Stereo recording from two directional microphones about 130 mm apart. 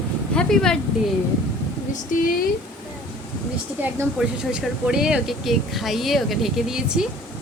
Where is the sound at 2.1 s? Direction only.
90° left.